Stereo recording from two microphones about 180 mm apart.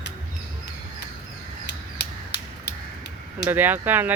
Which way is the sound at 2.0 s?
65° left (ahead or behind).